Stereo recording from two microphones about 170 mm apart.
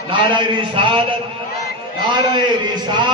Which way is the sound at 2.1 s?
25° right (ahead or behind).